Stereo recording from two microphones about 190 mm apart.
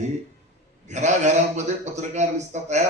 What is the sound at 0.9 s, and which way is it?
A man's voice, 40° right (ahead or behind).